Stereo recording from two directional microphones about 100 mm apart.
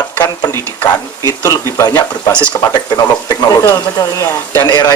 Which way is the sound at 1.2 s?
30° left (ahead or behind).